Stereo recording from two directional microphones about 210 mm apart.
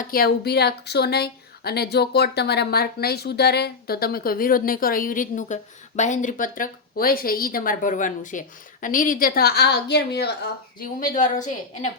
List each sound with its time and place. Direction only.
0.0 s speech: 45° left (ahead or behind)
10.8 s a woman's voice: 40° left (ahead or behind)